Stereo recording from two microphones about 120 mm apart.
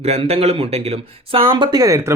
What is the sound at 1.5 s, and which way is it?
Speech, 40° right (ahead or behind).